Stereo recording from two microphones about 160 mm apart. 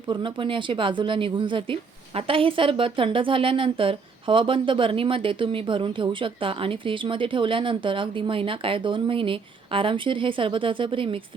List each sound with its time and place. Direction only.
0.1 s speech: 30° right (ahead or behind)